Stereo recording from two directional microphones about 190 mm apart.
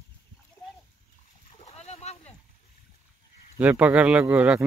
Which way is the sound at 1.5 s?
35° left (ahead or behind).